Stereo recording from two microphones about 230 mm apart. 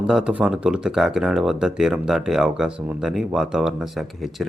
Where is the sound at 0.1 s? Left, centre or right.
Centre.